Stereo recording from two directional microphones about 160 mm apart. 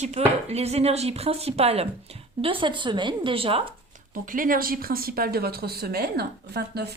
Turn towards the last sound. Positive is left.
turn(degrees=-85)